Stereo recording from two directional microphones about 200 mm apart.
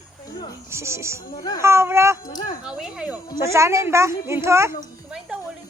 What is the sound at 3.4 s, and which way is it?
A woman's voice, 15° right (ahead or behind).